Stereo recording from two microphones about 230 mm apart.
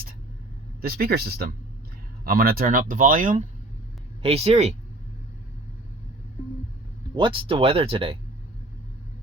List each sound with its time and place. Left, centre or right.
0.8 s speech: right
7.2 s speech: right